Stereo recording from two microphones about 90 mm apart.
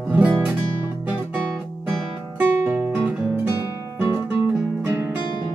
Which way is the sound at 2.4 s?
25° right (ahead or behind).